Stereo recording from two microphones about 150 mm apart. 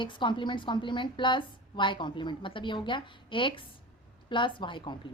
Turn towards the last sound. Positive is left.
turn(degrees=30)  # may be behind; listen again after turning